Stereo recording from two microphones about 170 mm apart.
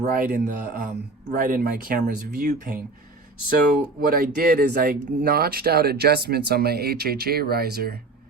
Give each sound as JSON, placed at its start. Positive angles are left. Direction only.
{"t": 0.0, "sound": "speech", "side_deg": -55}
{"t": 4.0, "sound": "speech", "side_deg": -60}